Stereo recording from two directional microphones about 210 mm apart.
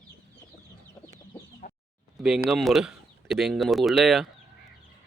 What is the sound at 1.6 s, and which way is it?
Chicken, 40° left (ahead or behind).